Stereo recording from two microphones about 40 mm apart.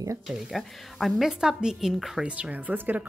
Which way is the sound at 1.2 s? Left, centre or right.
Centre.